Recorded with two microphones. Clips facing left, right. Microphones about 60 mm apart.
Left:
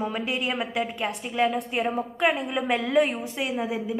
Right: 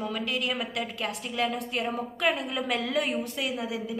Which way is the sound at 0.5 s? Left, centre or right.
Centre.